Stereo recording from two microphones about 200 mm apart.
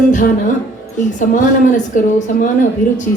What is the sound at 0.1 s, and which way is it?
A woman's voice, 40° left (ahead or behind).